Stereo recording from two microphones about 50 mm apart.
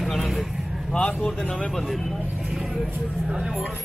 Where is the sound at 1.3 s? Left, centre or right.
Centre.